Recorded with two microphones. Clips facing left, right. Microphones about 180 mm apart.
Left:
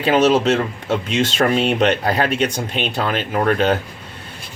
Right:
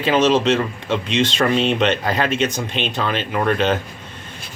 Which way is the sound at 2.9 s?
45° left (ahead or behind).